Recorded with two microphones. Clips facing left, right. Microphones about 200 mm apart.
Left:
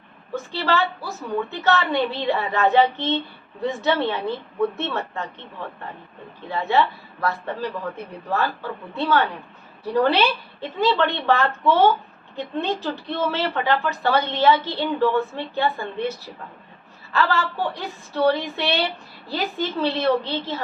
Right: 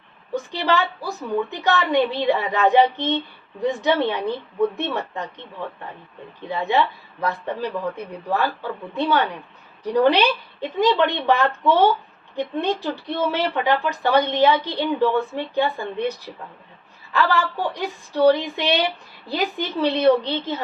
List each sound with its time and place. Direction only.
0.3 s a woman's voice: 15° right (ahead or behind)
6.5 s a woman's voice: 15° right (ahead or behind)